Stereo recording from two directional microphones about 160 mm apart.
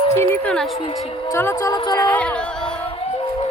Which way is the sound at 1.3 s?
15° left (ahead or behind).